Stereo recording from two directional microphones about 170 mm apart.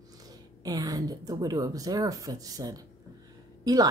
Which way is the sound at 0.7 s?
20° right (ahead or behind).